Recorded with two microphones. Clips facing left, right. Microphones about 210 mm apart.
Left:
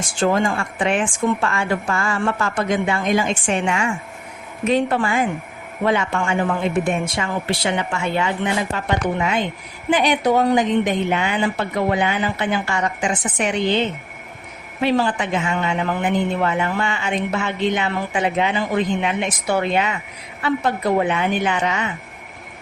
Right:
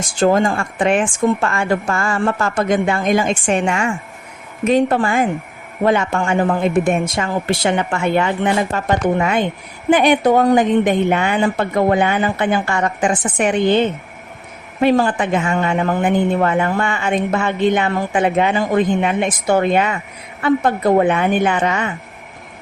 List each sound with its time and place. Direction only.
0.2 s a man's voice: 40° right (ahead or behind)